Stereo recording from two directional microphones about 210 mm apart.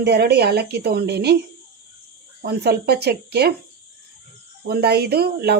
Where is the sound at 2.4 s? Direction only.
50° right (ahead or behind).